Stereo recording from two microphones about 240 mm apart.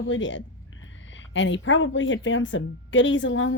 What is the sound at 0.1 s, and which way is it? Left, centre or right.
A woman's voice, left.